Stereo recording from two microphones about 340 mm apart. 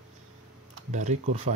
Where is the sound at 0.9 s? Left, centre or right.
Right.